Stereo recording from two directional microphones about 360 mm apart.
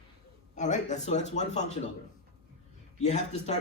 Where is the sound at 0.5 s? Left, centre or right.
Centre.